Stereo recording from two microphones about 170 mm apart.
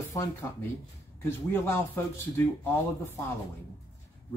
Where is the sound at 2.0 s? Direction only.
10° left (ahead or behind).